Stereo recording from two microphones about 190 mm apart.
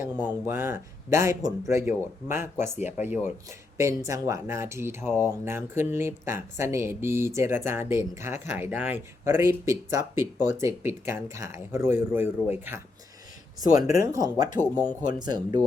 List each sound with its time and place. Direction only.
0.0 s speech: 10° right (ahead or behind)
3.8 s speech: 15° right (ahead or behind)
14.6 s speech: 10° left (ahead or behind)
15.2 s speech: 20° right (ahead or behind)